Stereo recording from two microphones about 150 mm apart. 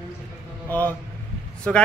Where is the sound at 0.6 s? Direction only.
10° left (ahead or behind).